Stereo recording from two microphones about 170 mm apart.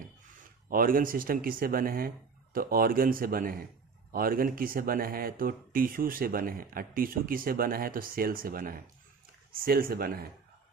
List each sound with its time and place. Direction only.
0.7 s speech: 55° right (ahead or behind)